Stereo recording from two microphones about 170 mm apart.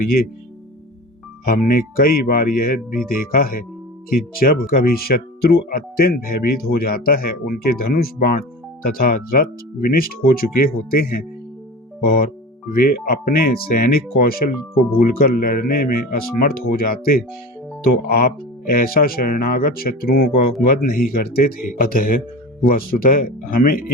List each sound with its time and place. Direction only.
1.5 s speech: 60° left (ahead or behind)